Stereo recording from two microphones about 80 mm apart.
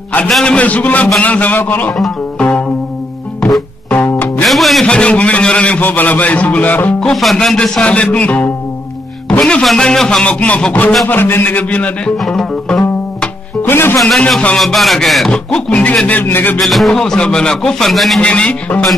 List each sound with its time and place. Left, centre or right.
0.3 s a man's voice: centre
0.6 s a man's voice: centre
2.0 s a man's voice: centre
3.3 s music: centre
3.9 s music: left
4.4 s music: centre
4.8 s a man's voice: centre
7.0 s a man's voice: centre
12.2 s music: centre
13.6 s music: left
13.9 s a man's voice: centre
15.3 s a man's voice: centre
16.5 s a man's voice: centre
18.2 s a man's voice: centre